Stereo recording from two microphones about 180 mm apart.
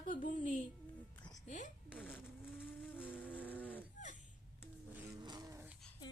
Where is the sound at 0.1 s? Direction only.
50° left (ahead or behind).